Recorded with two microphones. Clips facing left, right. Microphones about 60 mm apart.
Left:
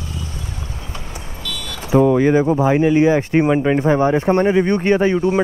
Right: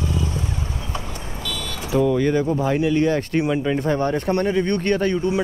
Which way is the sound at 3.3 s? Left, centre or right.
Left.